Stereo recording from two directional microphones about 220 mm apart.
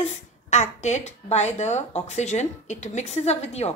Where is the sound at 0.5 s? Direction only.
30° left (ahead or behind).